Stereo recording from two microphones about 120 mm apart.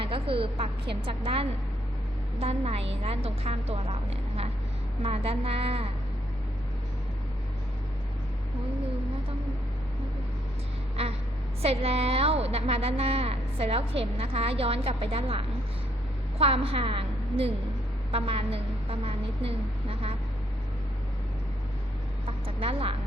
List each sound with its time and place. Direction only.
0.0 s a woman's voice: 50° right (ahead or behind)
11.6 s a woman's voice: 55° right (ahead or behind)
22.3 s speech: 50° right (ahead or behind)